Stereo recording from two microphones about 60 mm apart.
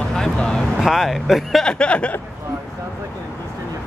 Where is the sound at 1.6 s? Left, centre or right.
Centre.